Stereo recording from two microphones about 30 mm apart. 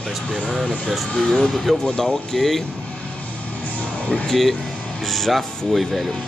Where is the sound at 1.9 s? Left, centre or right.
Centre.